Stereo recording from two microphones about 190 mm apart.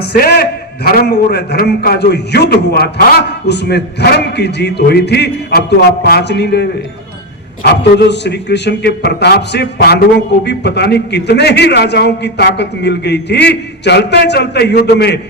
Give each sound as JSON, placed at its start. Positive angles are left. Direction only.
{"t": 0.2, "sound": "a man's voice", "side_deg": 55}